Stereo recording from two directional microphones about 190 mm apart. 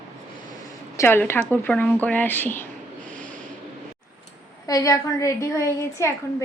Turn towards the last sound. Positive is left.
turn(degrees=15)  # may be behind; listen again after turning